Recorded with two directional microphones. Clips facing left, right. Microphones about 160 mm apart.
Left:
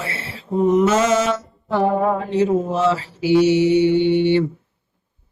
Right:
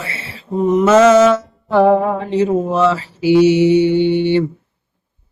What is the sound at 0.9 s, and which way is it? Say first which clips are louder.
Mantra: right 8 dB; 85° right.